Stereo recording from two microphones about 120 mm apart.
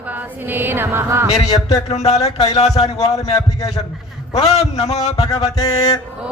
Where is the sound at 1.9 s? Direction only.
60° left (ahead or behind).